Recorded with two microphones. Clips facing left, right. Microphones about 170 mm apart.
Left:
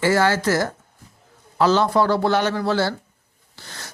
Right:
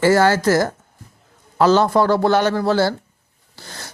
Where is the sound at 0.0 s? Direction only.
40° right (ahead or behind).